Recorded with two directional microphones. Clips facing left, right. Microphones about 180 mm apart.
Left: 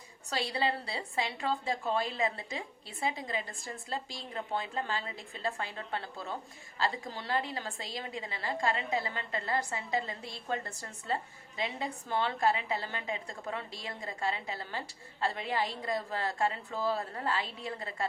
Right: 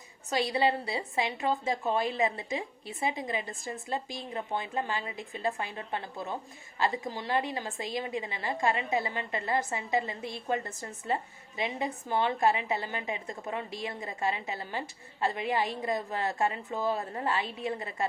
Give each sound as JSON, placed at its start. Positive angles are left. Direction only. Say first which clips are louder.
{"t": 0.3, "sound": "a woman's voice", "louder": "right 5 dB", "side_deg": -20}